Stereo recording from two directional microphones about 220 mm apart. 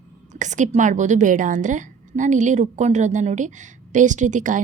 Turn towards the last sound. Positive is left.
turn(degrees=-35)  # may be behind; listen again after turning